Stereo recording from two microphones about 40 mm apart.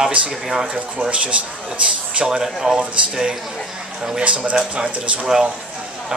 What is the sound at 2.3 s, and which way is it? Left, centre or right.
Speech, centre.